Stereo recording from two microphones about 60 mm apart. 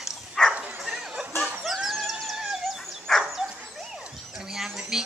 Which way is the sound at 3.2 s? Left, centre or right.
Centre.